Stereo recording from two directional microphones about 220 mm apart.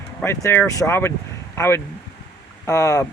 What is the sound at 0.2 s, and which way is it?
Speech, 10° left (ahead or behind).